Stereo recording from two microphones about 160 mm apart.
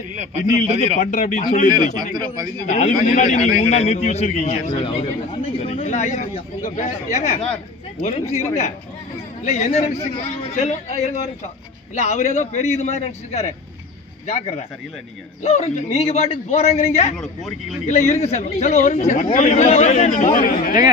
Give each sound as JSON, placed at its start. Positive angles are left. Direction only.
{"t": 0.7, "sound": "a man's voice", "side_deg": -40}
{"t": 0.9, "sound": "a man's voice", "side_deg": 50}
{"t": 2.1, "sound": "a man's voice", "side_deg": -25}
{"t": 2.7, "sound": "a man's voice", "side_deg": 40}
{"t": 17.2, "sound": "speech", "side_deg": 0}
{"t": 17.8, "sound": "a man's voice", "side_deg": 45}